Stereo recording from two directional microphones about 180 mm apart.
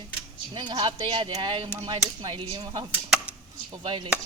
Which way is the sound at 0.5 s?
25° right (ahead or behind).